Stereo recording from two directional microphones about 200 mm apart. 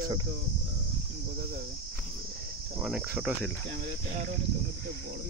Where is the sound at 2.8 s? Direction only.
5° right (ahead or behind).